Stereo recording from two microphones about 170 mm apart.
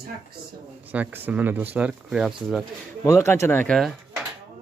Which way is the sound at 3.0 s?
15° left (ahead or behind).